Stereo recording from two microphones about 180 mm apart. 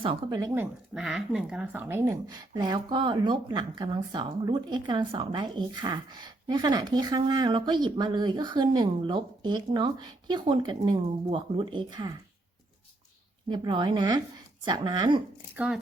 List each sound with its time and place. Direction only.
0.0 s speech: 30° right (ahead or behind)
0.3 s speech: 15° right (ahead or behind)
13.5 s speech: 25° right (ahead or behind)
15.5 s speech: 5° right (ahead or behind)